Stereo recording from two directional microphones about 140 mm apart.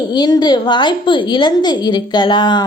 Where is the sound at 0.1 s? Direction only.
30° left (ahead or behind).